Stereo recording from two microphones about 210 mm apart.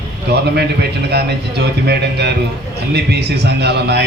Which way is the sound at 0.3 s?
50° right (ahead or behind).